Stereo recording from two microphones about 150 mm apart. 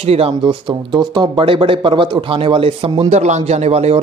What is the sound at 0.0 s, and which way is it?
Speech, 40° right (ahead or behind).